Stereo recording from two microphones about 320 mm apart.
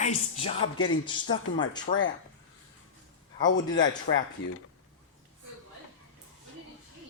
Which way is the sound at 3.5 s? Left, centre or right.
Centre.